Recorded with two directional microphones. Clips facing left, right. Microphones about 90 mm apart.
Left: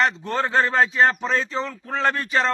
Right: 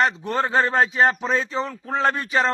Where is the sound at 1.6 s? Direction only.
10° right (ahead or behind).